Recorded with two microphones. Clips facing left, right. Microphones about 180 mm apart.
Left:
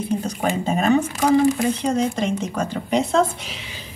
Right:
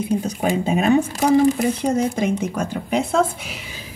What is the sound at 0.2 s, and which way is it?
Speech, 5° right (ahead or behind).